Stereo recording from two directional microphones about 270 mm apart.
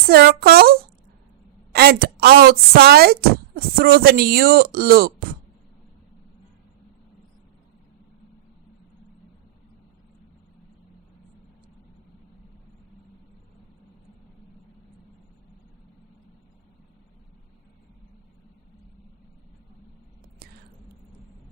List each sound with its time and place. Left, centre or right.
0.0 s speech: right